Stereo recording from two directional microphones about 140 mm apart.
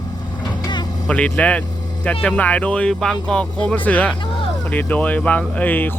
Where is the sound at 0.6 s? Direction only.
30° left (ahead or behind).